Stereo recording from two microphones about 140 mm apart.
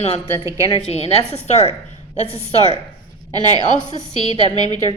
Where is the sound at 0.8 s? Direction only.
50° left (ahead or behind).